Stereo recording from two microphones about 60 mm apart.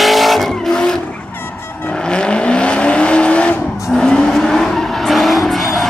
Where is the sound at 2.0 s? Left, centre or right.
Centre.